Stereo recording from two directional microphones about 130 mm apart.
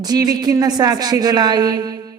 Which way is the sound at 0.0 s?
30° right (ahead or behind).